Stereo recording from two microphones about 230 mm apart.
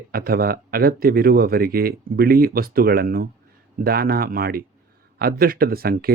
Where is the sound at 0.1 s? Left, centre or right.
Right.